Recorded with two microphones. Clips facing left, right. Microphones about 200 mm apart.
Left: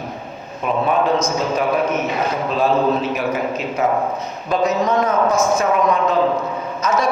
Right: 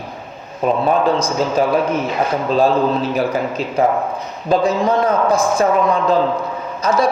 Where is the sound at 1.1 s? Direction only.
30° right (ahead or behind).